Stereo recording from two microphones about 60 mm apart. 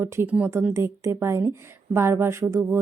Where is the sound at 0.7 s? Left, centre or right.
Right.